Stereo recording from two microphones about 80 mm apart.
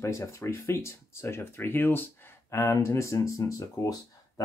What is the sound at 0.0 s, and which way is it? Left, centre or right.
Speech, left.